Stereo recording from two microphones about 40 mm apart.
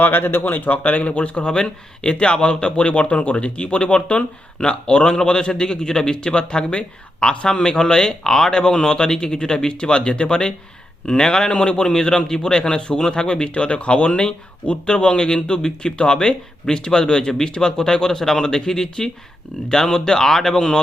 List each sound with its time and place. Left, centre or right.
0.0 s speech: left
1.5 s speech: left